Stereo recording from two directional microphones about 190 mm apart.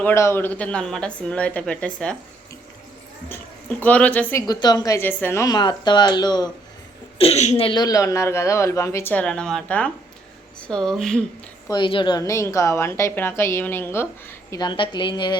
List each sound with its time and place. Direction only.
0.0 s a woman's voice: 15° left (ahead or behind)
3.8 s a woman's voice: 10° left (ahead or behind)
7.2 s a woman's voice: 35° left (ahead or behind); by 11.2 s centre (ahead or behind)
11.7 s a woman's voice: 25° left (ahead or behind)